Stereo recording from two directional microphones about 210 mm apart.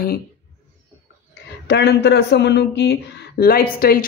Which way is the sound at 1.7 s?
55° left (ahead or behind).